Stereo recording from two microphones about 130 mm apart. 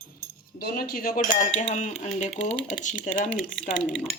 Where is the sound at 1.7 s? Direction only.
65° left (ahead or behind).